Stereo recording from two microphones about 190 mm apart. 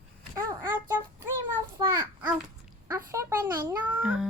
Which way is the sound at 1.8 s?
15° right (ahead or behind).